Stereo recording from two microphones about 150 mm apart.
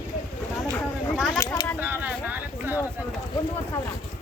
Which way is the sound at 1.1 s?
Centre (ahead or behind).